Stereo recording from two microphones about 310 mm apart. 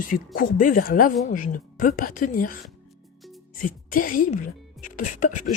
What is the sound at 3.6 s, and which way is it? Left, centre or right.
A woman's voice, left.